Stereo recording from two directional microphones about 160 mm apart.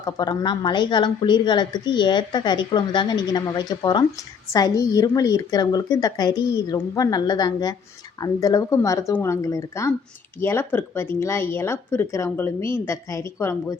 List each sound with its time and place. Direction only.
0.0 s speech: 25° left (ahead or behind)